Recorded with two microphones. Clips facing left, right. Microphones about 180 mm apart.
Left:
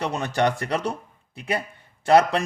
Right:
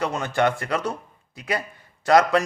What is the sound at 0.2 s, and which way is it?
A man's voice, 30° left (ahead or behind).